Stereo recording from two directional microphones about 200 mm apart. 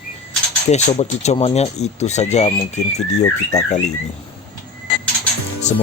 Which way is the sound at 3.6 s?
35° left (ahead or behind).